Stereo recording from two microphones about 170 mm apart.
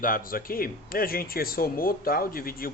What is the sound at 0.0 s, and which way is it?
Speech, 55° left (ahead or behind).